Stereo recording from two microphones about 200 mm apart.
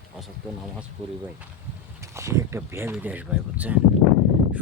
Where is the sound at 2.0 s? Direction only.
15° right (ahead or behind).